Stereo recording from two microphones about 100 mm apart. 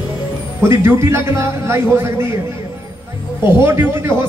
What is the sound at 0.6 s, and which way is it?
A man's voice, 25° right (ahead or behind).